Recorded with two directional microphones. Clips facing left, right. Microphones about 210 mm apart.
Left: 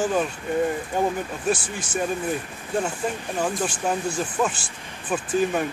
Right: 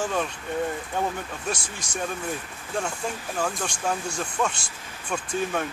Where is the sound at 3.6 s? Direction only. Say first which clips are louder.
Left 4 dB; 5° left (ahead or behind).